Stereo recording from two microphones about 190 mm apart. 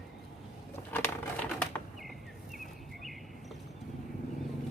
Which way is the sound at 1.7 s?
Centre (ahead or behind).